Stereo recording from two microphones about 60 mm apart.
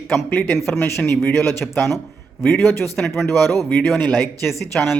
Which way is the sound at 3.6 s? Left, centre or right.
Left.